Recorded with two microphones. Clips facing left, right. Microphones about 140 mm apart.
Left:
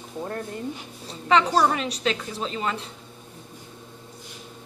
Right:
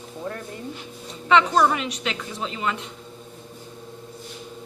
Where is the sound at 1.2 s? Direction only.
35° left (ahead or behind).